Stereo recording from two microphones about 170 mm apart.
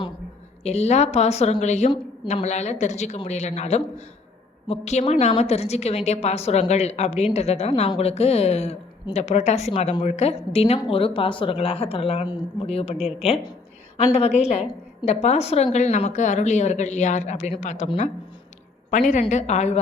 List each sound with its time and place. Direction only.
0.6 s a woman's voice: 40° left (ahead or behind)
18.9 s a woman's voice: 45° left (ahead or behind)